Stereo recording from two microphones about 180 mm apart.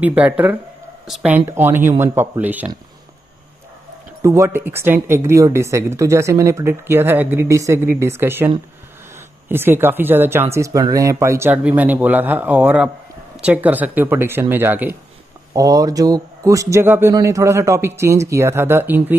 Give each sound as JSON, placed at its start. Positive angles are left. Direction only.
{"t": 0.0, "sound": "speech", "side_deg": -10}
{"t": 4.2, "sound": "speech", "side_deg": -15}
{"t": 9.5, "sound": "speech", "side_deg": -10}